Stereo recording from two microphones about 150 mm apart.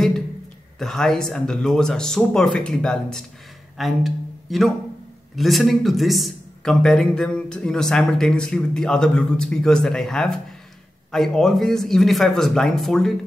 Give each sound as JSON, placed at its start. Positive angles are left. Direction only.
{"t": 0.7, "sound": "speech", "side_deg": 5}